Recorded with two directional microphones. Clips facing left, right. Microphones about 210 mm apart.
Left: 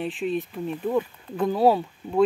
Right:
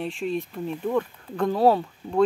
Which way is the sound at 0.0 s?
Centre (ahead or behind).